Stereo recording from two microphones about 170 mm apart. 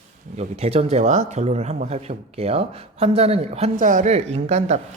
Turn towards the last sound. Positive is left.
turn(degrees=-40)  # may be behind; listen again after turning